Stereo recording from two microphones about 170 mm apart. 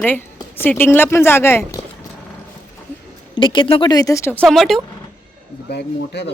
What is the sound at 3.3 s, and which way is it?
Speech, 30° left (ahead or behind).